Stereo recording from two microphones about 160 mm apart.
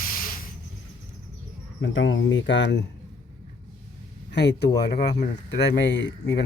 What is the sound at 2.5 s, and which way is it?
Speech, 90° left.